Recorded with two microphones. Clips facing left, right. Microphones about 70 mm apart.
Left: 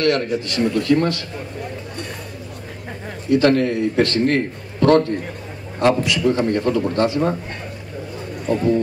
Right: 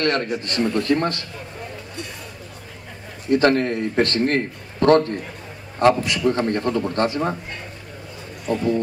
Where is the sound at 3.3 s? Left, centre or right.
Right.